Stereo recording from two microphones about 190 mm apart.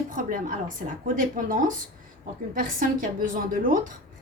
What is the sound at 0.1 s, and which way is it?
A woman's voice, 45° right (ahead or behind).